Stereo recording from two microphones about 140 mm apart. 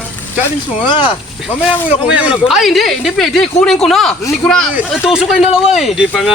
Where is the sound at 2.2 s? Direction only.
Centre (ahead or behind).